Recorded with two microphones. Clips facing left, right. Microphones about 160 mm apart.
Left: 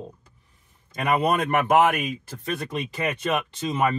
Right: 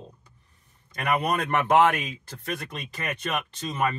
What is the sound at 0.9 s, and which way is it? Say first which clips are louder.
Speech: left 3 dB; 20° left (ahead or behind).